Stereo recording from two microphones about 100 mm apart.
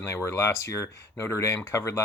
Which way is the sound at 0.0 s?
25° left (ahead or behind).